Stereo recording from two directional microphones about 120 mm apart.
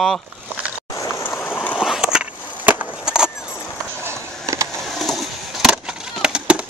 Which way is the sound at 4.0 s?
25° right (ahead or behind).